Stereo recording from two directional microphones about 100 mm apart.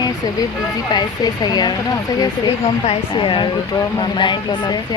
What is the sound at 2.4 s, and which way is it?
Speech, 65° left (ahead or behind).